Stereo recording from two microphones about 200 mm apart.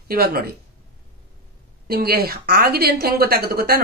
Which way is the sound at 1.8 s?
50° right (ahead or behind).